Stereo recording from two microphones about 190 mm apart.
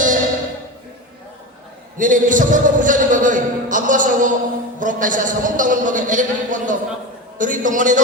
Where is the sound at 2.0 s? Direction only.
45° right (ahead or behind).